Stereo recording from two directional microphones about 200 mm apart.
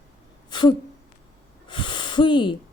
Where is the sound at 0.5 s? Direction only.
25° left (ahead or behind).